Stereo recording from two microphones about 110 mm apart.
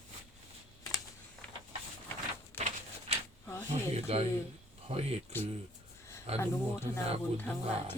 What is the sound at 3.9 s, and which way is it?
Speech, 65° right (ahead or behind).